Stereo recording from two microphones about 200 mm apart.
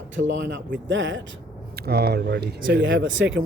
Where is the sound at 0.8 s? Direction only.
65° right (ahead or behind).